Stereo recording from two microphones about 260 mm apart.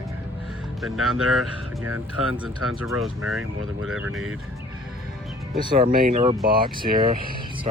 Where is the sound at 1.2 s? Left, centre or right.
Right.